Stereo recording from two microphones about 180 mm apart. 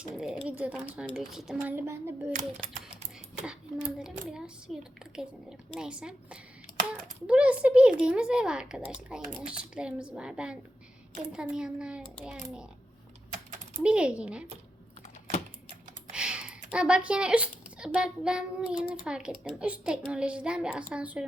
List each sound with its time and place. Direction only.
0.1 s a child's voice: centre (ahead or behind)
2.3 s a child's voice: 45° right (ahead or behind)
3.4 s a child's voice: 5° right (ahead or behind)
13.8 s a child's voice: 5° right (ahead or behind)
16.1 s computer keyboard: 5° right (ahead or behind)
16.7 s a child's voice: 5° right (ahead or behind)